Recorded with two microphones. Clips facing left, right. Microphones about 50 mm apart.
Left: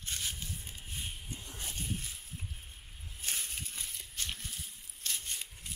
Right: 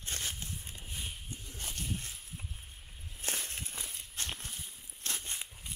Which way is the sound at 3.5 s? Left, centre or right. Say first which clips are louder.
Right 1 dB; right.